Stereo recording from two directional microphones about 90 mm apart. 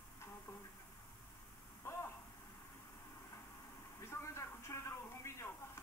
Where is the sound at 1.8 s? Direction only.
30° left (ahead or behind).